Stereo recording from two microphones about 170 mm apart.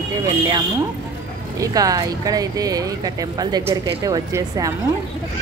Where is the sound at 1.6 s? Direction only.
20° right (ahead or behind).